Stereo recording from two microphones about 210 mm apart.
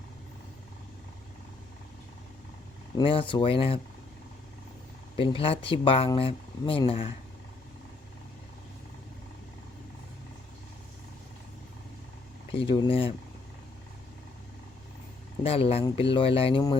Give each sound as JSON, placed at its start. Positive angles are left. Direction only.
{"t": 2.9, "sound": "speech", "side_deg": 25}
{"t": 5.1, "sound": "speech", "side_deg": 25}
{"t": 12.5, "sound": "speech", "side_deg": 25}
{"t": 15.4, "sound": "speech", "side_deg": 25}